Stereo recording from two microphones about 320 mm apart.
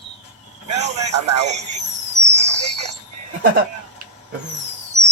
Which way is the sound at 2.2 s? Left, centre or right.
Right.